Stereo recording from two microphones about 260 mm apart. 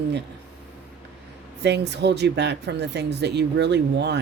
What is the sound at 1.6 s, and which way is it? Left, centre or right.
Speech, right.